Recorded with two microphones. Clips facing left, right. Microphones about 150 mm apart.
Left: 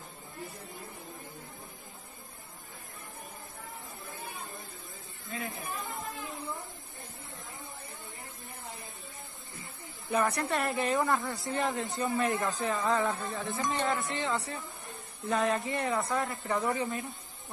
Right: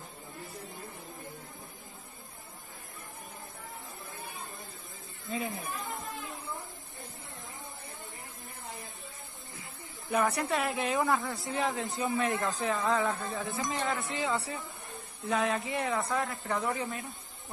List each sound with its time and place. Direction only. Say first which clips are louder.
5.3 s speech: right 4 dB; 20° right (ahead or behind)
5.8 s chatter: even; centre (ahead or behind)
10.0 s speech: even; centre (ahead or behind)